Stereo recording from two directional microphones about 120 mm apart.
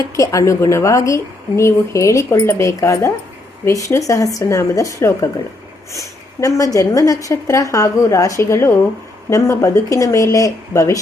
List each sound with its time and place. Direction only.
0.2 s a woman's voice: 25° left (ahead or behind)